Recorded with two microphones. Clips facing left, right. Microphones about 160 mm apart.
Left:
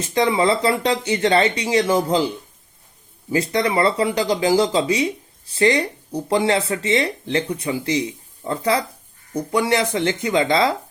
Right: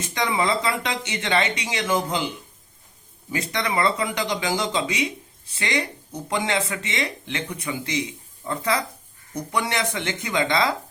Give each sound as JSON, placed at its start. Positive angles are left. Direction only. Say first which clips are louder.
{"t": 0.1, "sound": "speech", "louder": "left 6 dB", "side_deg": 30}
{"t": 3.5, "sound": "speech", "louder": "left 4 dB", "side_deg": 30}